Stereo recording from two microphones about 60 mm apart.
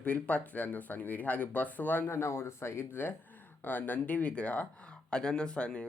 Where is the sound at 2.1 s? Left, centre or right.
Left; by 5.9 s centre.